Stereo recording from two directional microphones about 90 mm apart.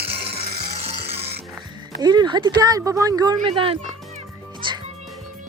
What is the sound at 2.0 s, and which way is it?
Speech, 50° right (ahead or behind).